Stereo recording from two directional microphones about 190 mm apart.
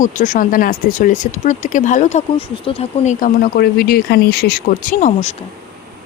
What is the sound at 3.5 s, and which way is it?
Speech, 55° left (ahead or behind).